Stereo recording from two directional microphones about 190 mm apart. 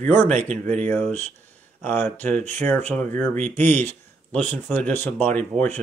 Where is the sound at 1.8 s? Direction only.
10° left (ahead or behind).